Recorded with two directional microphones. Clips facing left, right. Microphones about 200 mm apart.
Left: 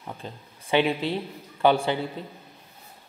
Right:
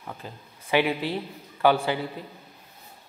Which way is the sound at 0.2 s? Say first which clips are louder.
Left 2 dB; 25° left (ahead or behind).